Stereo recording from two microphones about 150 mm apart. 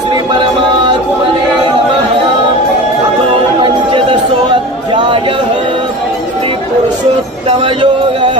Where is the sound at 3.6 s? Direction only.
35° right (ahead or behind).